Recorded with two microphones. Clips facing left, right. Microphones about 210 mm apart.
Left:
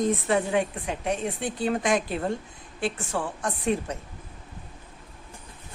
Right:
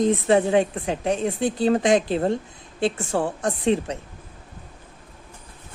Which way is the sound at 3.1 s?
40° right (ahead or behind).